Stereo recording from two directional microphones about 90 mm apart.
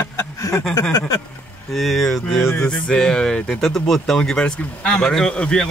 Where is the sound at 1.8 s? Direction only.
Centre (ahead or behind).